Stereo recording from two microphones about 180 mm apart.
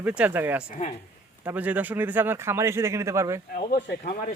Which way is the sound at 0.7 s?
40° left (ahead or behind).